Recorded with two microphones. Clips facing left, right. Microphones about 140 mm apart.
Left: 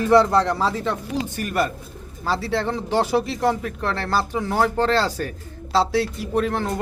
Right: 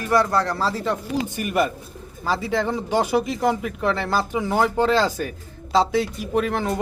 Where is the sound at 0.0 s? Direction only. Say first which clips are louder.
Left 4 dB; 25° left (ahead or behind).